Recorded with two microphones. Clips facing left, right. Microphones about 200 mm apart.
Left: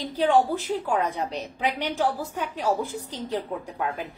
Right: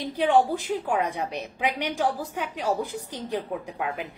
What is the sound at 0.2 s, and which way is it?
A woman's voice, 15° right (ahead or behind).